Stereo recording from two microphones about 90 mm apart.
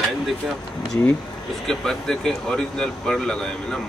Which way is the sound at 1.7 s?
5° left (ahead or behind).